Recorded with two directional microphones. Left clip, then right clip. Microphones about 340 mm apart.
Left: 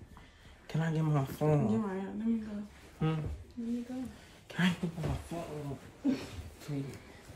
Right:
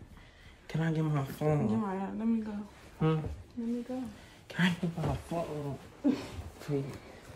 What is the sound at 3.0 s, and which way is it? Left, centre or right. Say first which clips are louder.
Speech: right 5 dB; centre.